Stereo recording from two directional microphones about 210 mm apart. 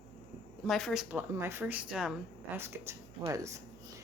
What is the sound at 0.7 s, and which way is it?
Speech, centre (ahead or behind).